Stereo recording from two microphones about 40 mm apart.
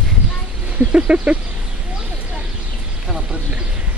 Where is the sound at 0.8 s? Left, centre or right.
Right.